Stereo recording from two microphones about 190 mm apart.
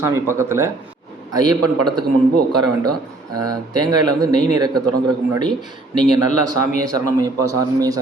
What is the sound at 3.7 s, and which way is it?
A man's voice, 20° right (ahead or behind).